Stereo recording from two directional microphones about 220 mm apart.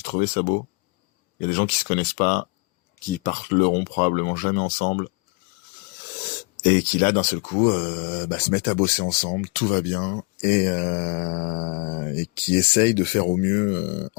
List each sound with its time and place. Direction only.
0.0 s speech: 40° left (ahead or behind)